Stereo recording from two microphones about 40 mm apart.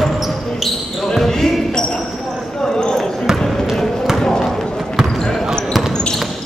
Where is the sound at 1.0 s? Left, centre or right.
Centre.